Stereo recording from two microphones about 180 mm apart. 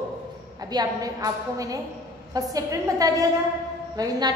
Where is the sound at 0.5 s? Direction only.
20° right (ahead or behind).